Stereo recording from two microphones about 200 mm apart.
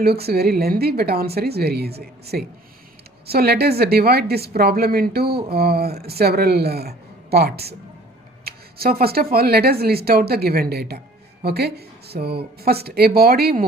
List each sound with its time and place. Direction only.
0.0 s speech: 50° right (ahead or behind)